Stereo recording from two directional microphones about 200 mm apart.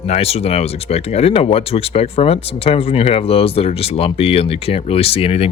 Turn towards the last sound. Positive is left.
turn(degrees=30)  # may be behind; listen again after turning